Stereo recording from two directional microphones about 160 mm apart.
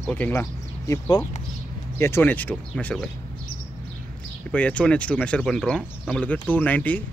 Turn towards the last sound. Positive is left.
turn(degrees=10)  # may be behind; listen again after turning